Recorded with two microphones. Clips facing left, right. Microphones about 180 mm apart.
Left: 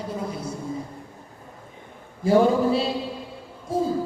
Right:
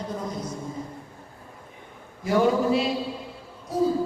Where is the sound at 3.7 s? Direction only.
25° left (ahead or behind).